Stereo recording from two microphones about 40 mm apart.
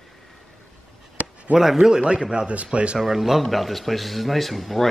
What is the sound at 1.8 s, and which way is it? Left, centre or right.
Speech, centre.